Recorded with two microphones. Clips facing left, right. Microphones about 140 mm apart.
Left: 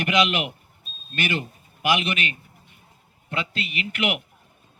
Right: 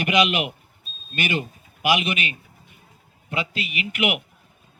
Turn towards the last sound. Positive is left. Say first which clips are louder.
# right 2 dB
turn(degrees=-15)  # may be behind; listen again after turning